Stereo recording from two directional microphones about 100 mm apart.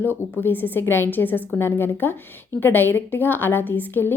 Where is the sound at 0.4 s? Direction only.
20° left (ahead or behind).